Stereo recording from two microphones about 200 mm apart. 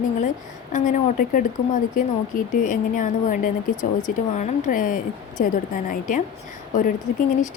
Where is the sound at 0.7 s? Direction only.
40° left (ahead or behind).